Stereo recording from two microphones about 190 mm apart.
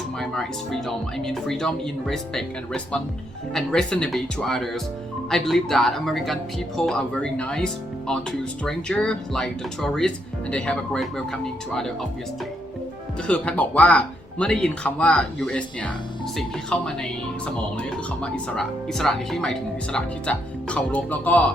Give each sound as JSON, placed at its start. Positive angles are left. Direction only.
{"t": 0.2, "sound": "speech", "side_deg": 0}
{"t": 13.2, "sound": "speech", "side_deg": 5}